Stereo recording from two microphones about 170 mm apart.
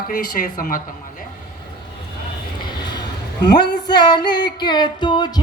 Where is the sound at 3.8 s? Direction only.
25° left (ahead or behind).